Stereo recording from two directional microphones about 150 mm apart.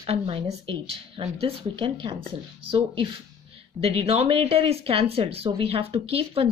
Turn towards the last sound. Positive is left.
turn(degrees=-40)  # may be behind; listen again after turning